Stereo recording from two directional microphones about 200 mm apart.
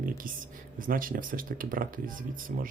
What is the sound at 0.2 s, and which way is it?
Speech, 45° right (ahead or behind).